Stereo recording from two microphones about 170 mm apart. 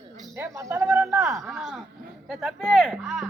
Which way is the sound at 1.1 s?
5° right (ahead or behind).